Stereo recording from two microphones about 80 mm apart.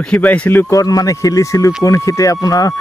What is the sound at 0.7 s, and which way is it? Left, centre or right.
Speech, left.